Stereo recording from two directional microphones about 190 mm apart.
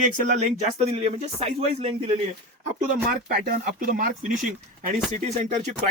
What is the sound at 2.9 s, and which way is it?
Speech, 45° right (ahead or behind).